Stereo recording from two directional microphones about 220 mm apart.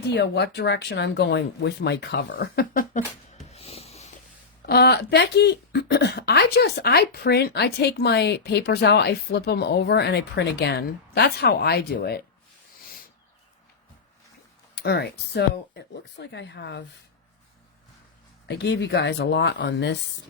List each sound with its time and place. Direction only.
0.1 s speech: 50° left (ahead or behind)
3.4 s a sound: 30° left (ahead or behind)
4.6 s speech: 45° left (ahead or behind)
14.8 s speech: 50° left (ahead or behind)
18.4 s speech: 50° left (ahead or behind)